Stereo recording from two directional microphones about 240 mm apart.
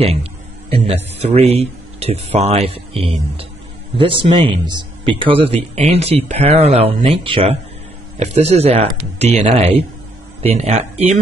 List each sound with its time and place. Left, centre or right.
0.0 s speech: right